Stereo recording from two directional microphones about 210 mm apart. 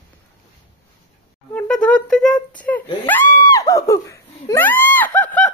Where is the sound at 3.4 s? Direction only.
15° left (ahead or behind).